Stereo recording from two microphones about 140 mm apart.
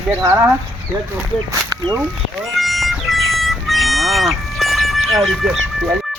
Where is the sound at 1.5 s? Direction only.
25° right (ahead or behind).